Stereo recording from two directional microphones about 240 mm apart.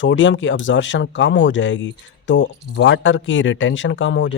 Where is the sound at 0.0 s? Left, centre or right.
Left.